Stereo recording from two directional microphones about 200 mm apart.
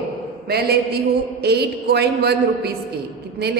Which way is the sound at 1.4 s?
55° right (ahead or behind).